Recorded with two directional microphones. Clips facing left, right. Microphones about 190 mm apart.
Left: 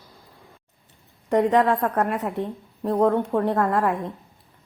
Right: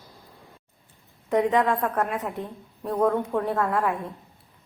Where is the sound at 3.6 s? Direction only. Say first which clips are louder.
Left 3 dB; 15° left (ahead or behind).